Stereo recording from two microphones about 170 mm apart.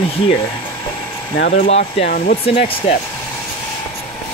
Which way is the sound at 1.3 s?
65° left (ahead or behind).